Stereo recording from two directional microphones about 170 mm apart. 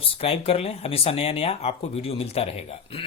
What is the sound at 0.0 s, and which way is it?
Speech, 35° left (ahead or behind).